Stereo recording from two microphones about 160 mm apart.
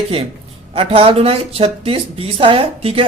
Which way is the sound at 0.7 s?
35° right (ahead or behind).